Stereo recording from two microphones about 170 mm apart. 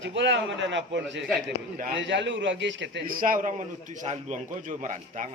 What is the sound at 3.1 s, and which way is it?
Speech, 55° right (ahead or behind).